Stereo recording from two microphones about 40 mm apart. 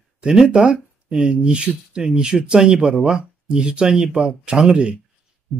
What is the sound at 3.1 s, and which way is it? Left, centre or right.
Speech, right.